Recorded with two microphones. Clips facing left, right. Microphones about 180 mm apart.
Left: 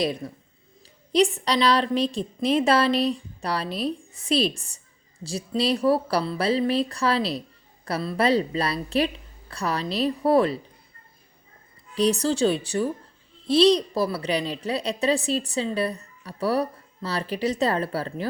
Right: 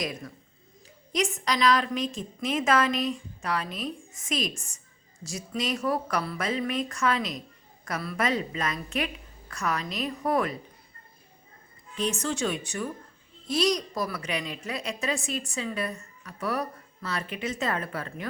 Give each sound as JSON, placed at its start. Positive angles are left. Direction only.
{"t": 0.0, "sound": "a woman's voice", "side_deg": 30}
{"t": 11.9, "sound": "a woman's voice", "side_deg": 35}